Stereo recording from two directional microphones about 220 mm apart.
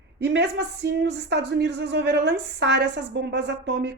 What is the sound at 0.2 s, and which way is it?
Speech, 50° right (ahead or behind).